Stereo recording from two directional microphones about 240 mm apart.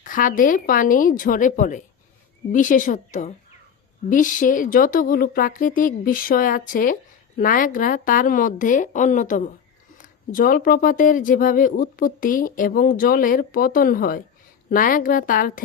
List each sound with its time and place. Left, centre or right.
0.0 s a woman's voice: left